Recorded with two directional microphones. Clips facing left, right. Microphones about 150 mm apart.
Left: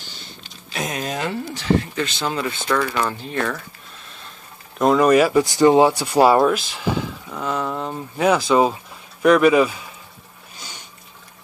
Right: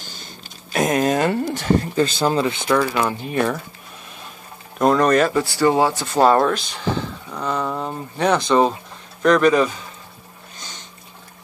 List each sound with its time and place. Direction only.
0.0 s a sound: 45° right (ahead or behind)
2.4 s speech: 15° right (ahead or behind)
4.7 s speech: centre (ahead or behind)